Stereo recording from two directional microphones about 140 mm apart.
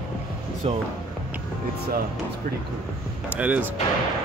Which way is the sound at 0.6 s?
45° right (ahead or behind).